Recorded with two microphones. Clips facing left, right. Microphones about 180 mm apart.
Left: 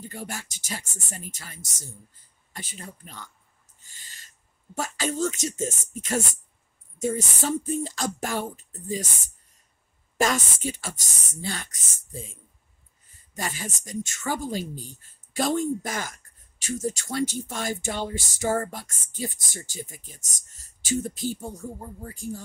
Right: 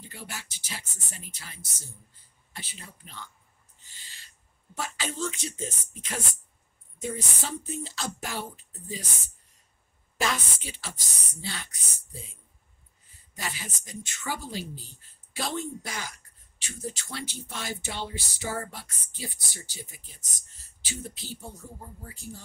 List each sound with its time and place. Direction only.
0.0 s speech: 45° left (ahead or behind)
3.8 s owl: 45° left (ahead or behind)
4.7 s speech: 45° left (ahead or behind)
10.1 s speech: 45° left (ahead or behind)